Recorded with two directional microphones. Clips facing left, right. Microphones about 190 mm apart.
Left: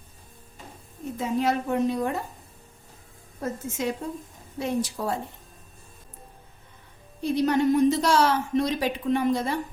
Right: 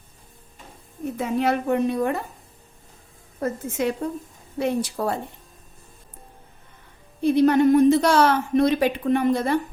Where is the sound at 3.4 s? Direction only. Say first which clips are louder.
Right 4 dB; 60° right (ahead or behind).